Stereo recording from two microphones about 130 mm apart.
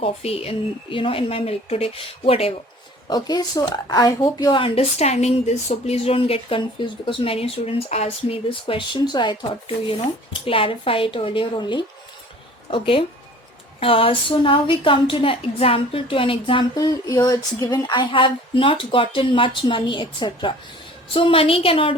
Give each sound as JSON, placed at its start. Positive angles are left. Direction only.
{"t": 0.0, "sound": "speech", "side_deg": 50}
{"t": 3.1, "sound": "speech", "side_deg": 30}
{"t": 4.6, "sound": "speech", "side_deg": 50}
{"t": 17.1, "sound": "speech", "side_deg": 30}